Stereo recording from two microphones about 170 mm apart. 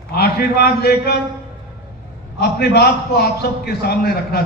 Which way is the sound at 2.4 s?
70° left (ahead or behind).